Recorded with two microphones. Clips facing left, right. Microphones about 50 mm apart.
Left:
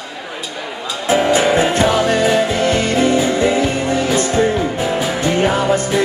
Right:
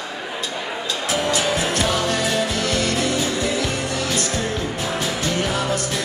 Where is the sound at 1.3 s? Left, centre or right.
Left.